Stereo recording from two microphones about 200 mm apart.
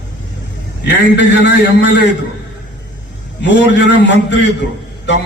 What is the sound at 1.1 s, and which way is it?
Speech, 65° left (ahead or behind).